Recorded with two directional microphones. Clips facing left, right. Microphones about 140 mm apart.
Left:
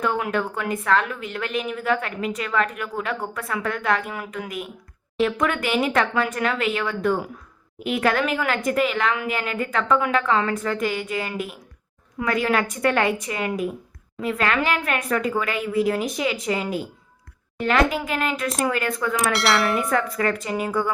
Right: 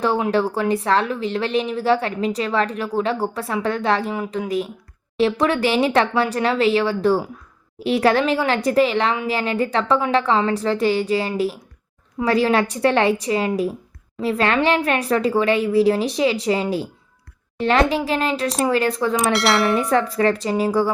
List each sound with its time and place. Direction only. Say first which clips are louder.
0.0 s a woman's voice: right 5 dB; 30° right (ahead or behind)
19.3 s dishes: right 2 dB; centre (ahead or behind)
19.9 s a woman's voice: right 5 dB; 30° right (ahead or behind)